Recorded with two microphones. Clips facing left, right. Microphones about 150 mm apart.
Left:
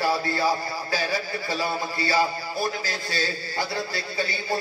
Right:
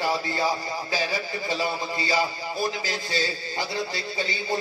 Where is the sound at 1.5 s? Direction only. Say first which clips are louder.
Even; 20° right (ahead or behind).